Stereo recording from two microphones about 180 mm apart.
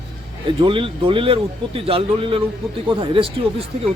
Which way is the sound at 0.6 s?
30° right (ahead or behind).